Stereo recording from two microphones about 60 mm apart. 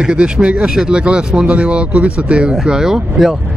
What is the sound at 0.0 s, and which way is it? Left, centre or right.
Speech, centre.